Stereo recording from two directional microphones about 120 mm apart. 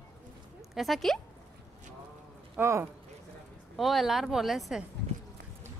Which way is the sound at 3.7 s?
Centre (ahead or behind).